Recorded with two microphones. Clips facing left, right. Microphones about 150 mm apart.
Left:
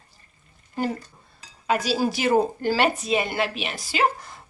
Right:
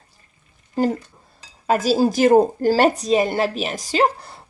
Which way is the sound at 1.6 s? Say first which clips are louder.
Right 6 dB; 40° right (ahead or behind).